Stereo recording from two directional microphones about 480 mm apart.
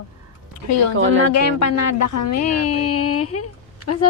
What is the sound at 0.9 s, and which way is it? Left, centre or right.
Speech, right.